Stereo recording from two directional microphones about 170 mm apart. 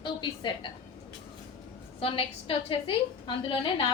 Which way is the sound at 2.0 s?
35° left (ahead or behind).